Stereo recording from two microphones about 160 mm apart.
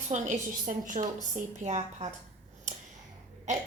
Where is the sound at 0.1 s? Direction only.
55° right (ahead or behind).